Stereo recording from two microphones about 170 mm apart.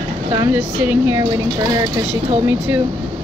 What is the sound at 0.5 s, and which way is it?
Speech, 10° right (ahead or behind).